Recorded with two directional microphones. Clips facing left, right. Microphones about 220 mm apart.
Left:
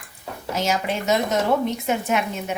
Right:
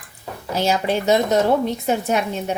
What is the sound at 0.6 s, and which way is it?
Speech, 35° right (ahead or behind).